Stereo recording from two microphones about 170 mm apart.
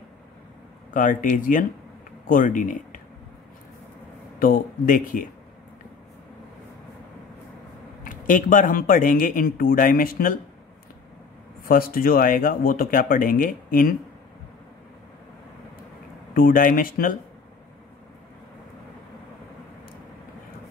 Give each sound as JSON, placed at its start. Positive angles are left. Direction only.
{"t": 0.9, "sound": "speech", "side_deg": 50}
{"t": 4.4, "sound": "speech", "side_deg": 55}
{"t": 8.0, "sound": "speech", "side_deg": 50}
{"t": 11.6, "sound": "speech", "side_deg": 60}
{"t": 16.3, "sound": "speech", "side_deg": 55}